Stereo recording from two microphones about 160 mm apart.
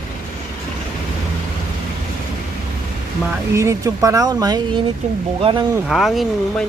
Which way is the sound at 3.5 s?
20° right (ahead or behind).